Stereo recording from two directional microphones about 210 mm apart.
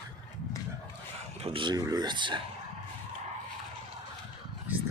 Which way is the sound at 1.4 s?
25° right (ahead or behind).